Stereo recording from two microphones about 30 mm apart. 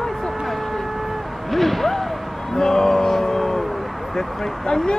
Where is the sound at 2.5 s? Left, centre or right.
Centre.